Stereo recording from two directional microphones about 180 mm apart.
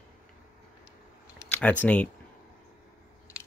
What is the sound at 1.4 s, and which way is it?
Speech, 10° left (ahead or behind).